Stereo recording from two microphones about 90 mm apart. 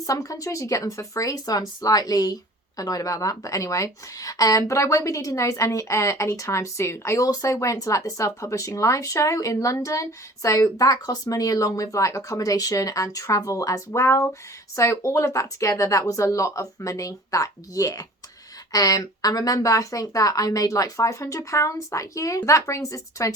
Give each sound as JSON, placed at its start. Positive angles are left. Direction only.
{"t": 0.0, "sound": "speech", "side_deg": 40}